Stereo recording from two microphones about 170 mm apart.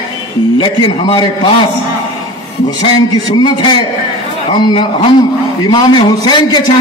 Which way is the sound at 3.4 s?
25° left (ahead or behind).